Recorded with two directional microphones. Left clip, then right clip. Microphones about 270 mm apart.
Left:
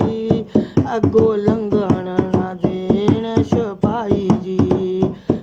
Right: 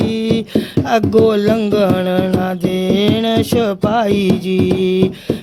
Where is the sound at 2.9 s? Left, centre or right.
Right.